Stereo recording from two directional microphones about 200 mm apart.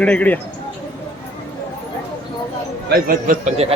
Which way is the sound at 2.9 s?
45° right (ahead or behind).